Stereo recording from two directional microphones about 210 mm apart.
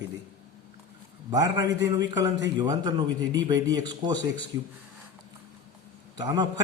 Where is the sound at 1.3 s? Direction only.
20° right (ahead or behind).